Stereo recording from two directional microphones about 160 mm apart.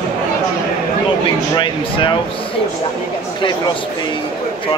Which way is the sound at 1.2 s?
30° left (ahead or behind).